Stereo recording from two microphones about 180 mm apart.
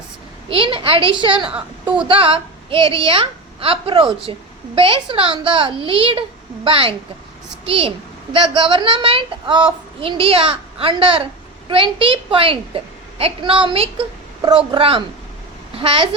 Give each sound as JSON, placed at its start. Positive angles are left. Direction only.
{"t": 0.5, "sound": "a woman's voice", "side_deg": -30}